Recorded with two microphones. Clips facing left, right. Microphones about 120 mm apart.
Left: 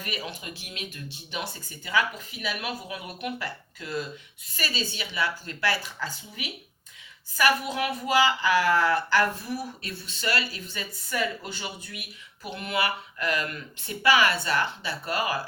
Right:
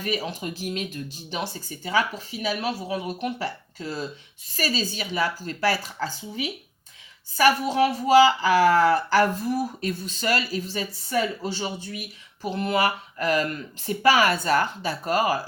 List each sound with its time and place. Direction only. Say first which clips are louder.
0.0 s speech: right 7 dB; 35° right (ahead or behind)